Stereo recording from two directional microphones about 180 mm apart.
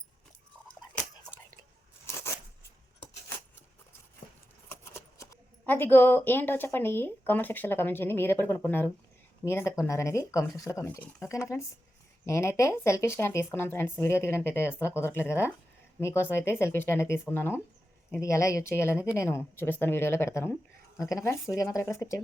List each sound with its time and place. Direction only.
4.7 s speech: 15° left (ahead or behind)